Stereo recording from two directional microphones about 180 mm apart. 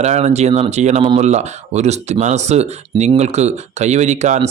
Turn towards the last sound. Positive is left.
turn(degrees=-40)  # may be behind; listen again after turning